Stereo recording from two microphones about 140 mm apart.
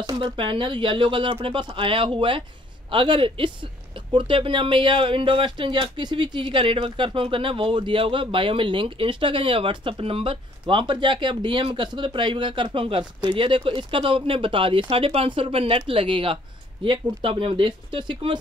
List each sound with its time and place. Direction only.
0.0 s speech: 35° right (ahead or behind)